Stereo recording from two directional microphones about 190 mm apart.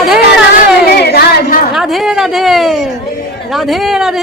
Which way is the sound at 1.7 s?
Centre (ahead or behind).